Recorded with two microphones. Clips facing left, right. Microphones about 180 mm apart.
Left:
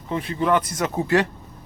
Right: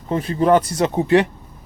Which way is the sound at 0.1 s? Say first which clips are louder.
Right 5 dB; 35° right (ahead or behind).